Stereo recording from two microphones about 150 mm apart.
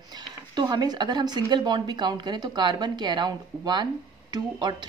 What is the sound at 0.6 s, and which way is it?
Speech, 30° right (ahead or behind).